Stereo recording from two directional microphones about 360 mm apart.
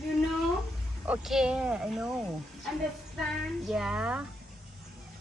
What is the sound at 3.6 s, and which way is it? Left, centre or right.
Speech, centre.